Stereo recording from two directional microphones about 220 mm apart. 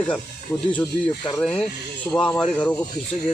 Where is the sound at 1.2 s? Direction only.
5° left (ahead or behind).